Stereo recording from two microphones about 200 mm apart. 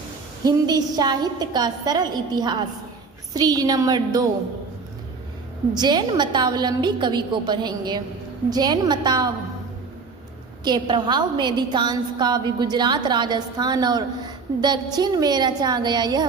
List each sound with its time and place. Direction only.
0.4 s a woman's voice: 20° right (ahead or behind)
5.7 s a woman's voice: 20° right (ahead or behind)
10.6 s a woman's voice: 20° right (ahead or behind)